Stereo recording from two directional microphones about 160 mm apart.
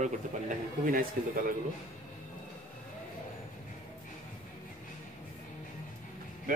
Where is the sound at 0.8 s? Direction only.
60° right (ahead or behind).